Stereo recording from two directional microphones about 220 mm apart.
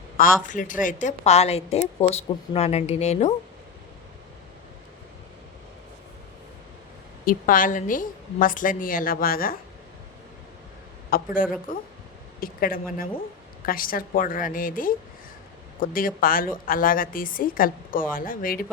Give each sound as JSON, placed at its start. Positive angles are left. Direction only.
{"t": 0.4, "sound": "a woman's voice", "side_deg": 35}
{"t": 7.3, "sound": "a woman's voice", "side_deg": 40}
{"t": 11.1, "sound": "a woman's voice", "side_deg": 40}